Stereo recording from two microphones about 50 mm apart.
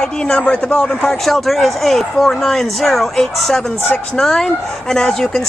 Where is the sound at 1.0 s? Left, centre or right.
Centre.